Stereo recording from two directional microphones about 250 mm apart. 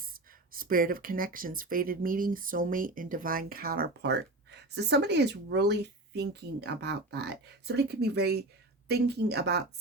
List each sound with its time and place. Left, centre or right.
0.1 s speech: right